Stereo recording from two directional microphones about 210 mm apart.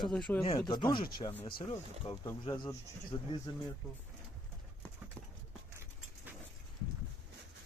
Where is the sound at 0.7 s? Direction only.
20° left (ahead or behind).